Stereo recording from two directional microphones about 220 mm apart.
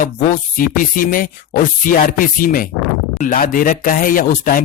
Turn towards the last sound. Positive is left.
turn(degrees=40)  # may be behind; listen again after turning